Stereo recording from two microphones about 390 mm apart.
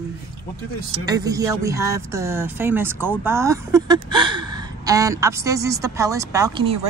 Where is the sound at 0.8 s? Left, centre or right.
Centre.